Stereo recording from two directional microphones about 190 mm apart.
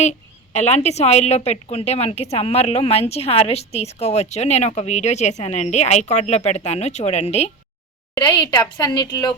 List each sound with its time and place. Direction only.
0.0 s a woman's voice: 35° left (ahead or behind)
8.1 s a woman's voice: 25° left (ahead or behind)